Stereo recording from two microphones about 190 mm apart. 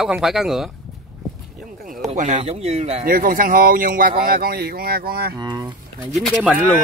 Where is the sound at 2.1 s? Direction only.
40° right (ahead or behind).